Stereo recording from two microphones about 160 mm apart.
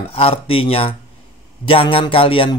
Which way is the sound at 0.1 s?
35° left (ahead or behind).